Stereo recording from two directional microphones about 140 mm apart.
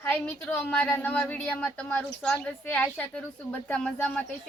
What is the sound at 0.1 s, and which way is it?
A woman's voice, 10° left (ahead or behind).